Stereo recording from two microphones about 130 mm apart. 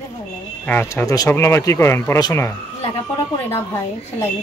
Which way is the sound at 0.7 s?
15° left (ahead or behind).